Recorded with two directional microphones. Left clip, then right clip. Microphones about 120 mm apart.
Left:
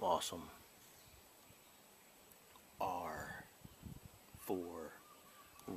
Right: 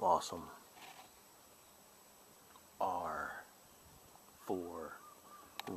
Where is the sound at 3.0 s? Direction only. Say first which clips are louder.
Right 5 dB; 30° left (ahead or behind).